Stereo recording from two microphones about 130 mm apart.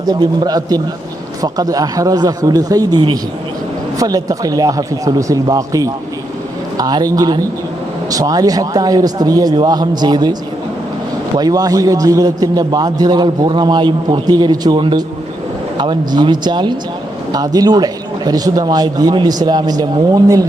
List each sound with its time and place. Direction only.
0.0 s a man's voice: 30° right (ahead or behind)
11.3 s a man's voice: 30° right (ahead or behind)